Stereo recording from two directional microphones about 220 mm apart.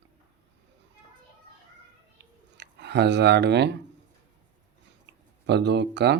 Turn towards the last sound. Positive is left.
turn(degrees=-50)  # may be behind; listen again after turning